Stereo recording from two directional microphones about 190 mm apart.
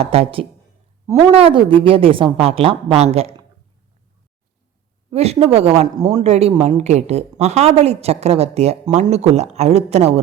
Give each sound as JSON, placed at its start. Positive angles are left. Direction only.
{"t": 0.0, "sound": "a woman's voice", "side_deg": -30}
{"t": 1.0, "sound": "a woman's voice", "side_deg": -15}
{"t": 1.3, "sound": "a woman's voice", "side_deg": -30}
{"t": 5.1, "sound": "a woman's voice", "side_deg": -35}